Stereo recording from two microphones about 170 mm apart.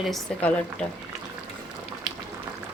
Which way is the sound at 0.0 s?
5° left (ahead or behind).